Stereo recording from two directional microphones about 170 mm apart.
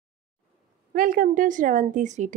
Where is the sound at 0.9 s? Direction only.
55° right (ahead or behind).